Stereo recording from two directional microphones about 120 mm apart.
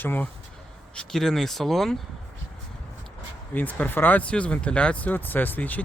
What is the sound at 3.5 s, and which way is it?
Speech, 15° left (ahead or behind).